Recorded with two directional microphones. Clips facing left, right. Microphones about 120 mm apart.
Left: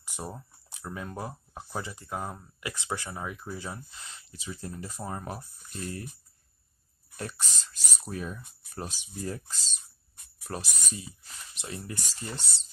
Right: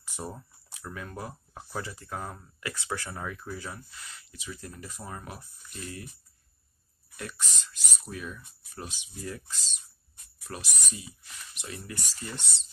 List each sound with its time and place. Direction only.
0.0 s speech: 15° left (ahead or behind); by 6.0 s 35° left (ahead or behind)
7.2 s speech: 35° left (ahead or behind)